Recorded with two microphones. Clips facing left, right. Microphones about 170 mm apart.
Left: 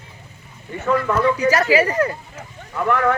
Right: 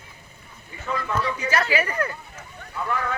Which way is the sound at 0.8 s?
65° left (ahead or behind).